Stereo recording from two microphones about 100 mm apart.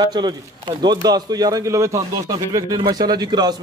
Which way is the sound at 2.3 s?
45° right (ahead or behind).